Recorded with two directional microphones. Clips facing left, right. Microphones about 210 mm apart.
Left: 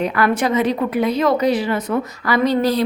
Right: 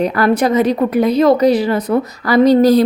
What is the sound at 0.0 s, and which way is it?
A woman's voice, 35° right (ahead or behind).